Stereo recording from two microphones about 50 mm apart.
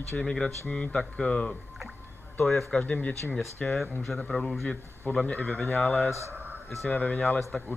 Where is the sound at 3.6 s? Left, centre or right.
Centre.